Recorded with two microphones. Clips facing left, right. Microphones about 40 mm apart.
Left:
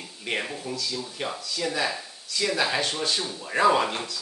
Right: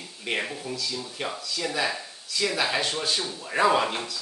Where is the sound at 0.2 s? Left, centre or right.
Centre.